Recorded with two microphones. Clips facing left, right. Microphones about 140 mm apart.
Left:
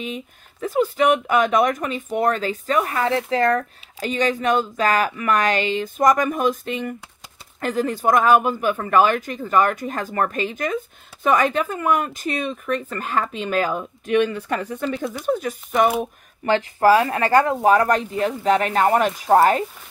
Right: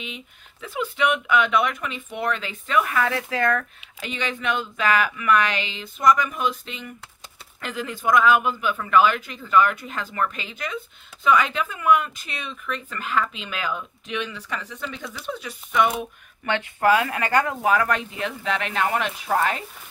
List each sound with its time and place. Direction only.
0.0 s speech: 45° left (ahead or behind)